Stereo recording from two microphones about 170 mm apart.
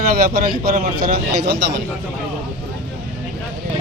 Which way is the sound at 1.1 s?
90° right.